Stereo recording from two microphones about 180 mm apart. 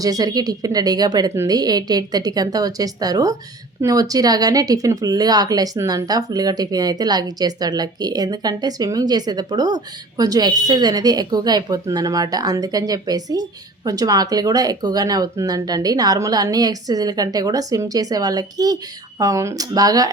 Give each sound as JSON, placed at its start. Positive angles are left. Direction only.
{"t": 0.0, "sound": "speech", "side_deg": -20}